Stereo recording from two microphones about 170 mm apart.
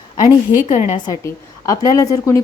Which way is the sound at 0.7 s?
45° left (ahead or behind).